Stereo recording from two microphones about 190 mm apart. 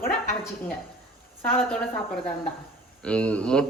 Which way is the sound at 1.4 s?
10° left (ahead or behind).